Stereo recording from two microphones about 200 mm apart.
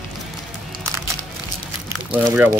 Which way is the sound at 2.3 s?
5° right (ahead or behind).